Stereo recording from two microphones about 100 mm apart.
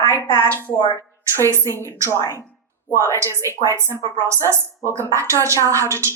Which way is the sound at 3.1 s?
30° right (ahead or behind).